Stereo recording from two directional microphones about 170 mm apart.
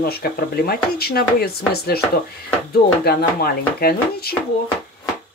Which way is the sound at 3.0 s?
65° left (ahead or behind).